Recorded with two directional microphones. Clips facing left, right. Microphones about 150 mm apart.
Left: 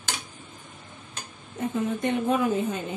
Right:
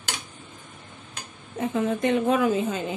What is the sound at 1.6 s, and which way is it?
Speech, 90° right.